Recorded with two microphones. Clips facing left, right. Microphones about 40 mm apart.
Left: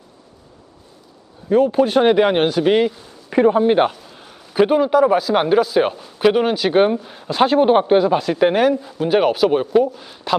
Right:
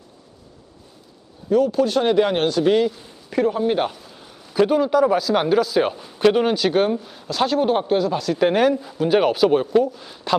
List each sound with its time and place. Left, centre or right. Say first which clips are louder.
1.5 s speech: left 3 dB; left
8.4 s speech: even; centre